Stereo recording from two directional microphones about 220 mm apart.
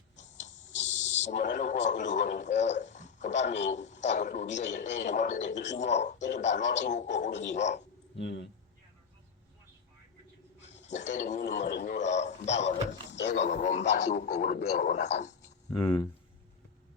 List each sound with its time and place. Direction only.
0.4 s speech: 30° left (ahead or behind)
8.2 s speech: 55° left (ahead or behind)
10.8 s speech: 35° left (ahead or behind); by 11.9 s 50° left (ahead or behind)
11.9 s speech: 30° left (ahead or behind)
13.1 s a sound: 55° left (ahead or behind)
13.3 s speech: 30° left (ahead or behind)
13.8 s speech: 45° left (ahead or behind)